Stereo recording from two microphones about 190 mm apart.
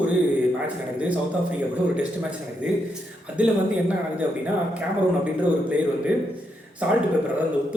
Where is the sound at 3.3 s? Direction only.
5° right (ahead or behind).